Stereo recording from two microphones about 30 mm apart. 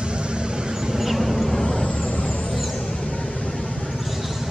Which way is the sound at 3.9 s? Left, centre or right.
Centre.